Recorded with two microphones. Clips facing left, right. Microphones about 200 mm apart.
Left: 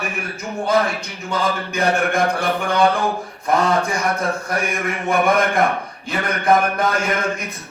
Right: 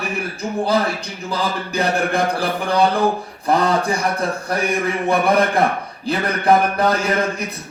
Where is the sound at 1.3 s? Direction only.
35° right (ahead or behind).